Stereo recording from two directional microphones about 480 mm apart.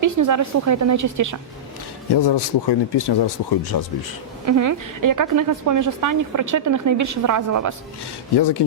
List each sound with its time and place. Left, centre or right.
0.0 s a woman's voice: right
2.1 s speech: left
4.4 s a woman's voice: right
8.4 s speech: left